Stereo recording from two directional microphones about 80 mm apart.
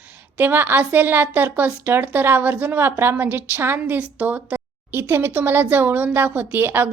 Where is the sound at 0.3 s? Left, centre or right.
Right.